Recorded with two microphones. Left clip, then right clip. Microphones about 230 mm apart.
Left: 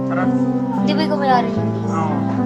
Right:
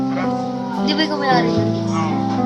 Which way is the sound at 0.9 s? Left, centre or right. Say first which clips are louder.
Even; centre.